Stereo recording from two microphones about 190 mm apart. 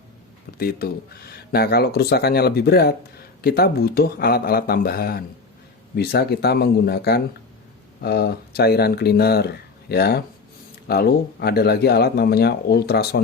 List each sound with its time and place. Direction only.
0.6 s speech: 55° left (ahead or behind)